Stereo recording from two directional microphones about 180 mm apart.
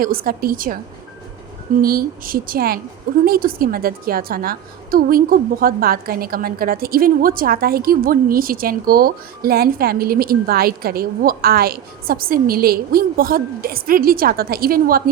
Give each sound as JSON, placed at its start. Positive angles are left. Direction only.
{"t": 0.0, "sound": "a woman's voice", "side_deg": -55}
{"t": 1.8, "sound": "a woman's voice", "side_deg": -55}